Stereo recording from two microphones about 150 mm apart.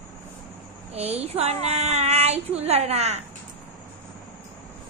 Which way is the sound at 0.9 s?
45° right (ahead or behind).